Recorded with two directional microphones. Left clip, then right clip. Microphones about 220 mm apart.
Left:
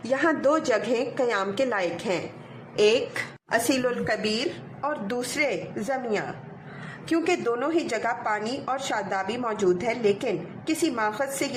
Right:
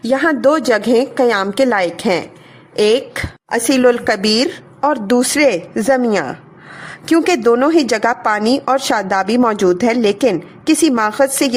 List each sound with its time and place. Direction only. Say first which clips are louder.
0.0 s a woman's voice: right 10 dB; 40° right (ahead or behind)
2.7 s a woman's voice: right 8 dB; 35° right (ahead or behind)
3.7 s a woman's voice: right 13 dB; 50° right (ahead or behind)